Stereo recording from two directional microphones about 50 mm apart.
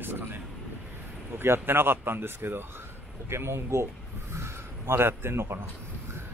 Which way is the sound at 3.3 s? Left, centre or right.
Right.